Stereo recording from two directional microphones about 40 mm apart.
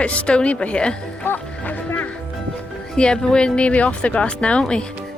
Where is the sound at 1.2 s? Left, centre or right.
Left.